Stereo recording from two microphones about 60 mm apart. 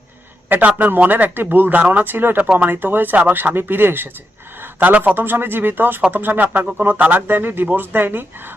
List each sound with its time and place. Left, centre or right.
0.4 s a man's voice: right